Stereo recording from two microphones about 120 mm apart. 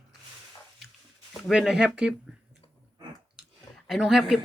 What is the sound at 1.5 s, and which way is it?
Speech, 5° right (ahead or behind).